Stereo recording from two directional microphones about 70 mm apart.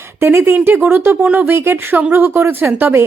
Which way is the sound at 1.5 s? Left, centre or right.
Right.